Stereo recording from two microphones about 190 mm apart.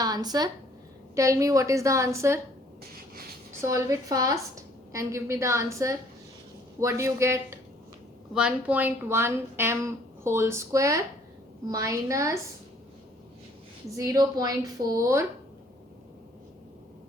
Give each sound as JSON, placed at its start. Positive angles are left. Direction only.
{"t": 0.0, "sound": "a woman's voice", "side_deg": -20}
{"t": 3.6, "sound": "a woman's voice", "side_deg": -15}
{"t": 8.3, "sound": "a woman's voice", "side_deg": -5}
{"t": 13.9, "sound": "a woman's voice", "side_deg": -15}